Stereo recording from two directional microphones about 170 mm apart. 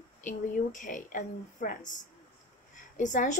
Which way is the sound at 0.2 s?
50° left (ahead or behind).